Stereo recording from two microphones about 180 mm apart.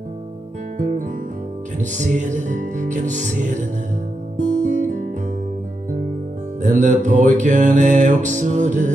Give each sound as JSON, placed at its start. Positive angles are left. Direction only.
{"t": 0.7, "sound": "guitar", "side_deg": -45}
{"t": 1.8, "sound": "music", "side_deg": -40}
{"t": 4.4, "sound": "guitar", "side_deg": -45}
{"t": 6.6, "sound": "music", "side_deg": -45}